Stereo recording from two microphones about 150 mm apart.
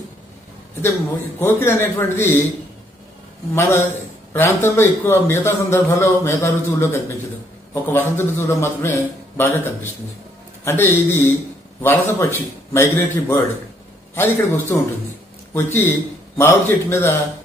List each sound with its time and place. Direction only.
1.4 s a man's voice: 15° left (ahead or behind)
3.5 s a man's voice: 15° left (ahead or behind)